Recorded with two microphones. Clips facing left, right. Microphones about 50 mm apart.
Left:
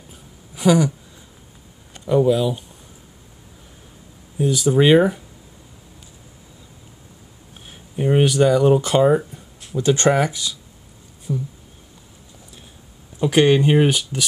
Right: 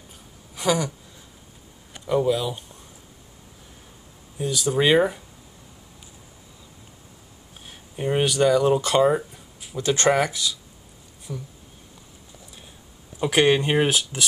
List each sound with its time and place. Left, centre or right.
0.6 s a sound: centre
2.0 s speech: centre
4.4 s speech: centre
7.6 s speech: centre
11.3 s speech: centre
13.2 s speech: centre